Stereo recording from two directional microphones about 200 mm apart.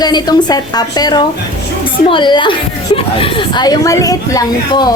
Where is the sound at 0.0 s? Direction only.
20° left (ahead or behind).